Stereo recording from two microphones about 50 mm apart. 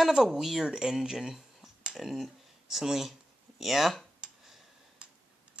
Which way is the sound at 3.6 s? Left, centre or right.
Centre.